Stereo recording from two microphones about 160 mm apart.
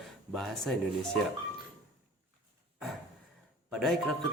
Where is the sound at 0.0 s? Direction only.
Centre (ahead or behind).